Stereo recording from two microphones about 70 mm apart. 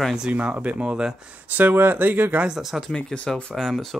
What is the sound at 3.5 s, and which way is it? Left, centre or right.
Speech, centre.